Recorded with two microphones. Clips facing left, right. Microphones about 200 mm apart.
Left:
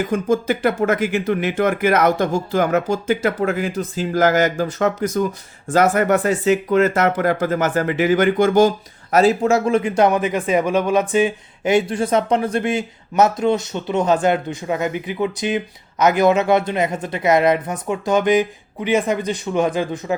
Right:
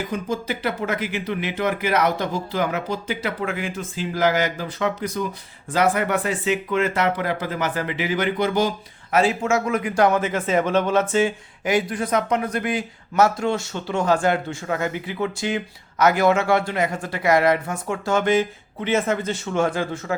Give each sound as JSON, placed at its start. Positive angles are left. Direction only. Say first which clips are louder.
{"t": 0.0, "sound": "speech", "louder": "left 7 dB", "side_deg": 50}